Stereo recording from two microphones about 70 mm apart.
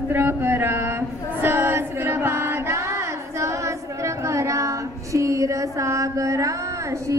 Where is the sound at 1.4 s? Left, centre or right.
Right.